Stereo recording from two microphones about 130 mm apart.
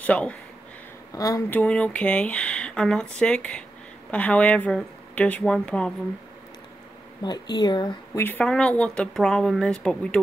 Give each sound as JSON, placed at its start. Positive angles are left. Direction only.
{"t": 0.0, "sound": "speech", "side_deg": 10}
{"t": 1.1, "sound": "speech", "side_deg": 25}
{"t": 1.5, "sound": "speech", "side_deg": 10}
{"t": 7.2, "sound": "speech", "side_deg": 35}
{"t": 8.2, "sound": "speech", "side_deg": 15}